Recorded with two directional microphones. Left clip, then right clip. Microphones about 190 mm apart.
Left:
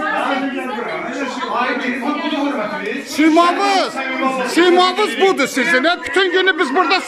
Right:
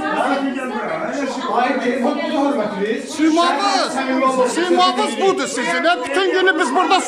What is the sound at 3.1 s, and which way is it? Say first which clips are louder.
A man's voice: left 4 dB; 5° left (ahead or behind).